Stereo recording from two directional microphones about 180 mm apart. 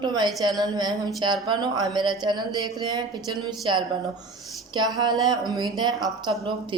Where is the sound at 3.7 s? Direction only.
25° right (ahead or behind).